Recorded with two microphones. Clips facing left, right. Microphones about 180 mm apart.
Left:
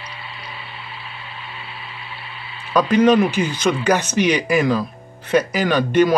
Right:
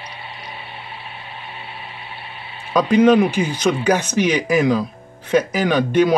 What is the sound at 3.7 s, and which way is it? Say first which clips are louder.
Speech: even; 10° right (ahead or behind).